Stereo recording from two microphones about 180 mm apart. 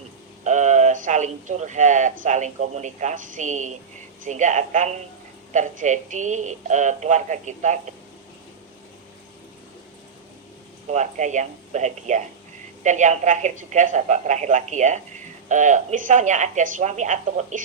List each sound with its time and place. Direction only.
0.4 s speech: 40° right (ahead or behind)
10.8 s speech: 40° right (ahead or behind)